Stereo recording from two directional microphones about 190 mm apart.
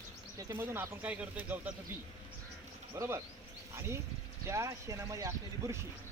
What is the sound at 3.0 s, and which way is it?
Speech, 15° right (ahead or behind).